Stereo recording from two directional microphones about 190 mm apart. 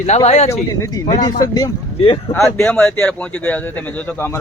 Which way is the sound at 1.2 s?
20° left (ahead or behind).